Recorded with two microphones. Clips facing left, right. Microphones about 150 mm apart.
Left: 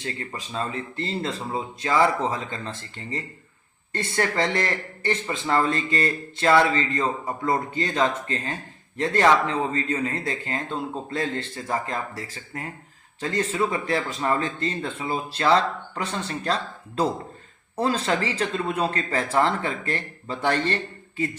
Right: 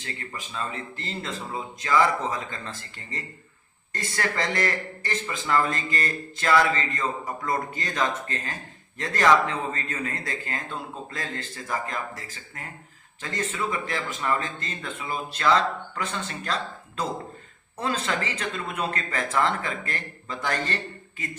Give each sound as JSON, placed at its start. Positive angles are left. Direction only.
{"t": 0.0, "sound": "speech", "side_deg": 30}